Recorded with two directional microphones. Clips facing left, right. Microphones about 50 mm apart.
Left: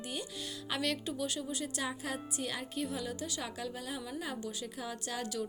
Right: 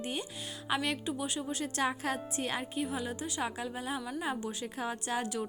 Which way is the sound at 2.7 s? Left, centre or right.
Right.